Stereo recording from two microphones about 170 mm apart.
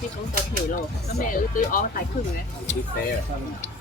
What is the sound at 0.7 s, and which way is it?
Speech, 50° left (ahead or behind).